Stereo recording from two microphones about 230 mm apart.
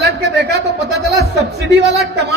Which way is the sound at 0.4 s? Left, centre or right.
Right.